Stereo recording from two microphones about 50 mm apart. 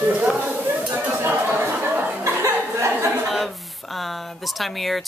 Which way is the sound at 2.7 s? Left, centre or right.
Right.